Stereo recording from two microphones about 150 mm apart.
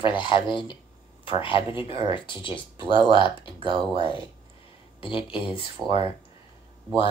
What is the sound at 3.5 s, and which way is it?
Speech, 30° right (ahead or behind).